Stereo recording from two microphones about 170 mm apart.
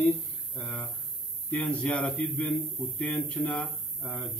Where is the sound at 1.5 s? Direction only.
5° left (ahead or behind).